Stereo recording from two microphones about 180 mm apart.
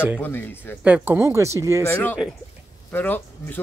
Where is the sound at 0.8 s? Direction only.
10° right (ahead or behind).